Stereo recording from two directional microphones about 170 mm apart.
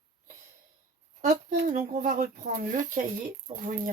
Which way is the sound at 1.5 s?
50° right (ahead or behind).